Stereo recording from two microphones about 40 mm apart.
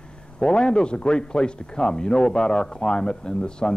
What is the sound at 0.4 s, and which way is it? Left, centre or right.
Speech, left.